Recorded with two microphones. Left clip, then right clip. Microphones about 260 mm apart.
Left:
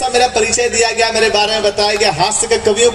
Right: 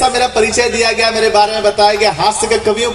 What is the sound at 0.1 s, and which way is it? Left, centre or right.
A man's voice, left.